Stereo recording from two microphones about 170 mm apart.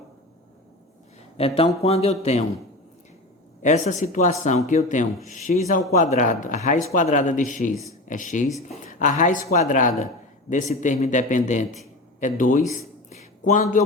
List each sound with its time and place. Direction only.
1.4 s speech: 35° left (ahead or behind)
3.6 s speech: 45° left (ahead or behind)